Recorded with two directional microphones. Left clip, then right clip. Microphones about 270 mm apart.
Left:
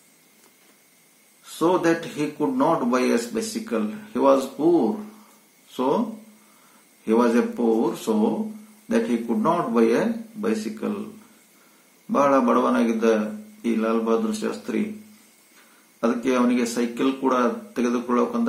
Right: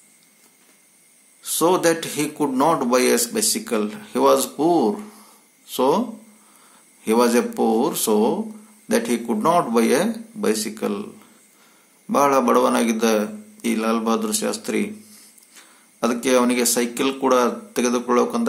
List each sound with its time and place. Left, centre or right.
1.4 s a man's voice: right
7.1 s a man's voice: right
12.1 s a man's voice: right
16.0 s a man's voice: right